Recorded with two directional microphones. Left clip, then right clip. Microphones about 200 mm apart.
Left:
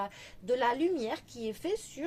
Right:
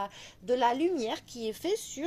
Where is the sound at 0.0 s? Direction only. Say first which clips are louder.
Right 1 dB; 35° right (ahead or behind).